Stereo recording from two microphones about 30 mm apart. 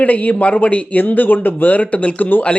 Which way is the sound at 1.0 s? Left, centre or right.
Left.